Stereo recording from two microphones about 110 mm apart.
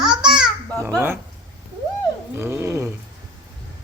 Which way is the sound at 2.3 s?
25° right (ahead or behind).